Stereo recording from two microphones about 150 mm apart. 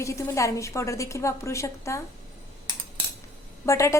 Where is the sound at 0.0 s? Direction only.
20° left (ahead or behind).